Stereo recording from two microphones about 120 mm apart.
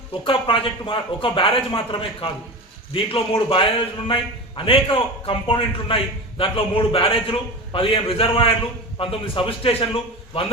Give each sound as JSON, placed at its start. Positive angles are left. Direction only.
{"t": 0.3, "sound": "a man's voice", "side_deg": 45}